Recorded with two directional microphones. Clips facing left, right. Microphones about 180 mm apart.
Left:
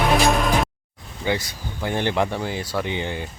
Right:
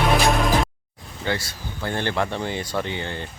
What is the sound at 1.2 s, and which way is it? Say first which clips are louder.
Speech: left 2 dB; 15° left (ahead or behind).